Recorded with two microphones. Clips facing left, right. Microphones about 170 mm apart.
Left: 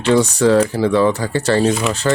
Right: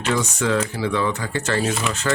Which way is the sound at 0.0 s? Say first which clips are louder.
Left 9 dB; 35° left (ahead or behind).